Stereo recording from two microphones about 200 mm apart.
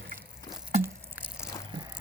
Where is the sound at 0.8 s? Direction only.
10° right (ahead or behind).